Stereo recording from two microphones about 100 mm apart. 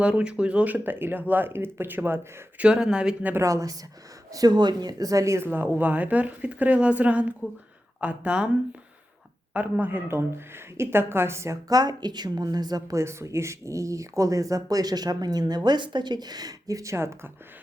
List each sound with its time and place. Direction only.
0.0 s speech: 10° right (ahead or behind)
2.6 s a woman's voice: 10° right (ahead or behind)
3.3 s a woman's voice: 35° right (ahead or behind); by 8.4 s 10° right (ahead or behind)
9.5 s speech: 15° right (ahead or behind)
11.7 s a woman's voice: 40° right (ahead or behind); by 17.3 s 25° right (ahead or behind)